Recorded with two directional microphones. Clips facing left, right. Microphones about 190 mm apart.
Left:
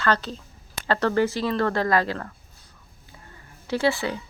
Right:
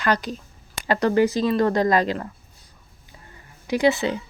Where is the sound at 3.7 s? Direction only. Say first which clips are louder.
Right 4 dB; 20° right (ahead or behind).